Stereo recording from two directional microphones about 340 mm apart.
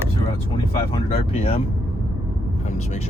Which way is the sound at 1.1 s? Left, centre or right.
Centre.